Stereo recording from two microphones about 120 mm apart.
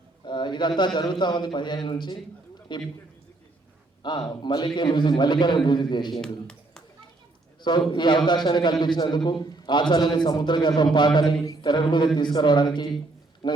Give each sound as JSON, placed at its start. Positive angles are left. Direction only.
{"t": 0.3, "sound": "bird", "side_deg": 40}
{"t": 1.2, "sound": "a man's voice", "side_deg": 40}
{"t": 4.0, "sound": "a man's voice", "side_deg": 40}
{"t": 7.6, "sound": "a man's voice", "side_deg": 40}